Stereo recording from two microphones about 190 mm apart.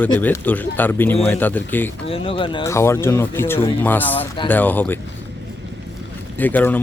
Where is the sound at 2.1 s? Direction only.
30° left (ahead or behind).